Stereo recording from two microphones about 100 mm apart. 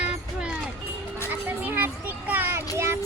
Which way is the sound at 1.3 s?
20° right (ahead or behind).